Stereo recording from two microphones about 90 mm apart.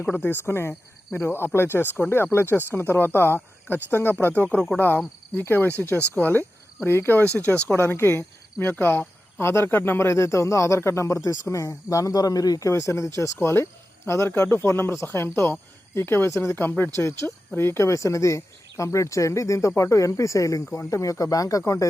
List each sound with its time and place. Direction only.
0.0 s speech: 20° left (ahead or behind)